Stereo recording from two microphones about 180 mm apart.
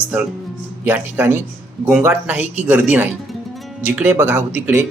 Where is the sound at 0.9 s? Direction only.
10° right (ahead or behind).